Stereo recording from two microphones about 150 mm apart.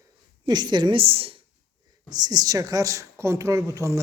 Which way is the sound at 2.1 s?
25° right (ahead or behind).